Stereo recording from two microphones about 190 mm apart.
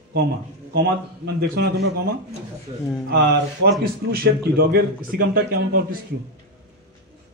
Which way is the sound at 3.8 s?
50° right (ahead or behind).